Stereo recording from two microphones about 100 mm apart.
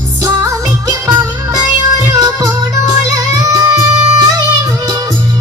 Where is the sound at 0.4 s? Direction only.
40° right (ahead or behind).